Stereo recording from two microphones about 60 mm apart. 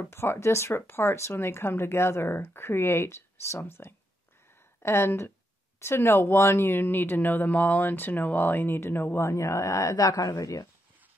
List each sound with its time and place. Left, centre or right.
0.0 s speech: left